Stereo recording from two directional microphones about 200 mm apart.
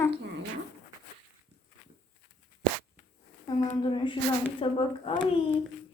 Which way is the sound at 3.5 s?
20° left (ahead or behind).